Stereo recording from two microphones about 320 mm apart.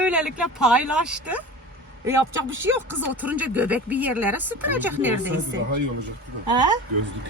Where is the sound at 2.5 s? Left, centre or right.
Right.